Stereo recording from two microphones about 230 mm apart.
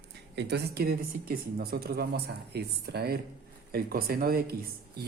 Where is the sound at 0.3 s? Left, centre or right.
Right.